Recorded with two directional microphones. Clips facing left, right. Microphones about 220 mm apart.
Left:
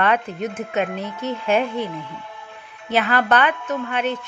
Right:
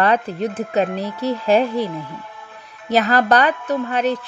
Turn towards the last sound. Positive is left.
turn(degrees=-35)  # may be behind; listen again after turning